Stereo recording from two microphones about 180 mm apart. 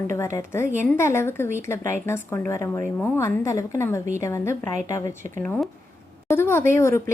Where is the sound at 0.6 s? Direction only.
45° right (ahead or behind).